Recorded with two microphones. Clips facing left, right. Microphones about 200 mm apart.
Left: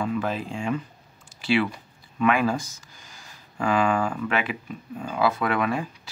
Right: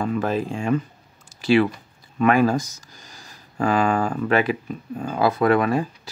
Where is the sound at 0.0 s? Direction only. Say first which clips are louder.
Right 4 dB; 40° right (ahead or behind).